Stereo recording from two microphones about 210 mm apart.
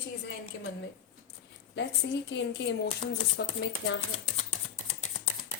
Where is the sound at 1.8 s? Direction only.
55° left (ahead or behind).